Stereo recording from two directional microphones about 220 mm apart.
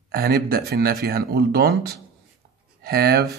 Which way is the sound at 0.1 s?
45° right (ahead or behind).